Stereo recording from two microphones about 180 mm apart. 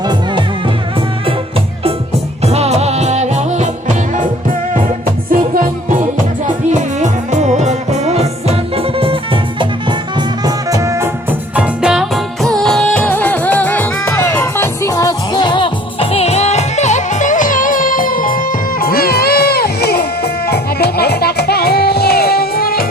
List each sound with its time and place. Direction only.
0.0 s music: 25° right (ahead or behind)
2.4 s music: 35° right (ahead or behind)
6.7 s music: 40° right (ahead or behind)
10.2 s music: 20° right (ahead or behind); by 22.9 s 55° left (ahead or behind)